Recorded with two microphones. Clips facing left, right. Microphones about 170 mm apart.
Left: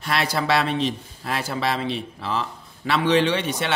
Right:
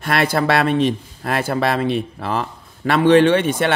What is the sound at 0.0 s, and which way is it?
Speech, 55° right (ahead or behind).